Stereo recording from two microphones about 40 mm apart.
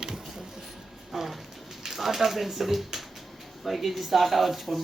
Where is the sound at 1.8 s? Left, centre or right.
Centre.